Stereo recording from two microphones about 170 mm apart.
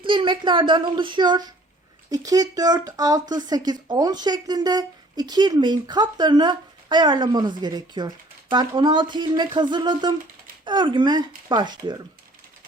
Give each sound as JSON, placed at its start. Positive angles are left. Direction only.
{"t": 0.0, "sound": "a child's voice", "side_deg": -30}